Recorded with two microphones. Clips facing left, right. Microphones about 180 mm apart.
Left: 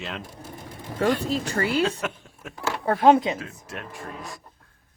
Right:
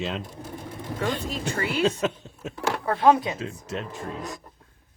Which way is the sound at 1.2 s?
35° left (ahead or behind).